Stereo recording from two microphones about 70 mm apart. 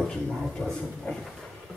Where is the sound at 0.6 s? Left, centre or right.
Centre.